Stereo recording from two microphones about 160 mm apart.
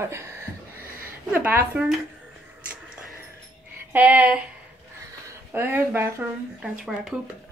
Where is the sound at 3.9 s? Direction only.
10° right (ahead or behind).